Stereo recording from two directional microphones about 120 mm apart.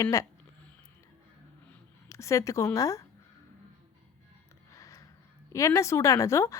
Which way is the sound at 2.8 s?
25° left (ahead or behind).